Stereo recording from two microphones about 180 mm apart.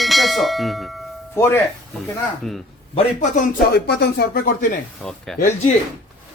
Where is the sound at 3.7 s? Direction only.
65° left (ahead or behind).